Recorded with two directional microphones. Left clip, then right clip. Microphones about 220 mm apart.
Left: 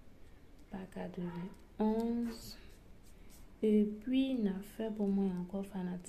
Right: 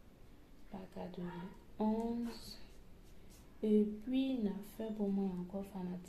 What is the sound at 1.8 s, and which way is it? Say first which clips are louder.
Speech: left 3 dB; 25° left (ahead or behind).